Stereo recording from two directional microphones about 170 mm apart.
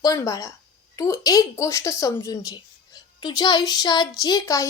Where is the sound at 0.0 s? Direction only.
20° left (ahead or behind).